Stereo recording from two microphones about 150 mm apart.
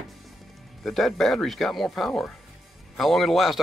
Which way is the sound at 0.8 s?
Centre (ahead or behind).